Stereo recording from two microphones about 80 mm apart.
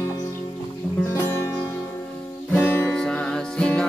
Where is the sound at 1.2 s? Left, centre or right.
Left.